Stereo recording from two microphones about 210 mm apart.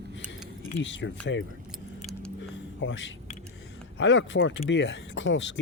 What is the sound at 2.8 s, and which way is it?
Speech, 60° left (ahead or behind).